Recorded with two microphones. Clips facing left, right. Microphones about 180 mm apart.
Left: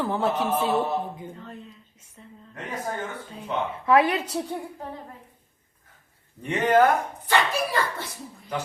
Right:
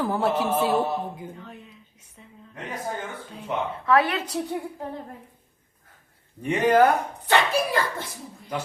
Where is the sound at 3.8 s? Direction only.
20° left (ahead or behind).